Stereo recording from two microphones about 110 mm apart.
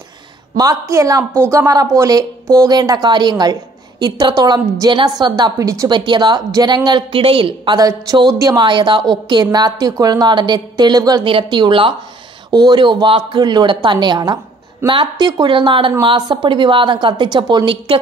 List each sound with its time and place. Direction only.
0.6 s a woman's voice: 30° right (ahead or behind)
5.9 s a woman's voice: 45° right (ahead or behind)
7.8 s a woman's voice: 35° right (ahead or behind)
8.6 s a woman's voice: 45° right (ahead or behind)
11.2 s a woman's voice: 50° right (ahead or behind)